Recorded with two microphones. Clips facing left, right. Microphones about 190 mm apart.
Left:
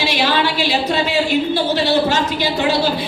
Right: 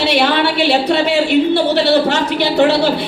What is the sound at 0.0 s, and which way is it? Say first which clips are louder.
A woman's voice: right 4 dB; 60° right (ahead or behind).